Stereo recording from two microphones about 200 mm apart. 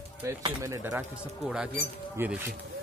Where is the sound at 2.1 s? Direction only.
10° right (ahead or behind).